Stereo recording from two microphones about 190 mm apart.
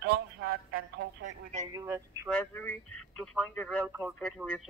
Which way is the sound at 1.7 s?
20° right (ahead or behind).